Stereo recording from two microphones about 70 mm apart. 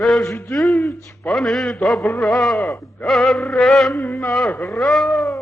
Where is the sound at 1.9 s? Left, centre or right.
Centre.